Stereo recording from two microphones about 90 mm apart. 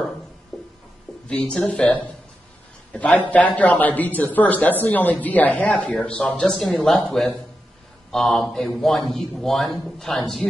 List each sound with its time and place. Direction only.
0.5 s music: centre (ahead or behind)
1.2 s a man's voice: 10° left (ahead or behind)
8.1 s a man's voice: 5° left (ahead or behind)